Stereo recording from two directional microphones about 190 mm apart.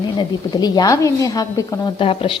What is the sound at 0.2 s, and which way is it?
Speech, 20° left (ahead or behind).